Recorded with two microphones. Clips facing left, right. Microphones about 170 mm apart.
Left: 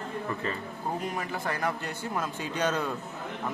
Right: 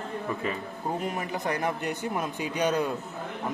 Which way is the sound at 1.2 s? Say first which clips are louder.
Right 2 dB; 20° right (ahead or behind).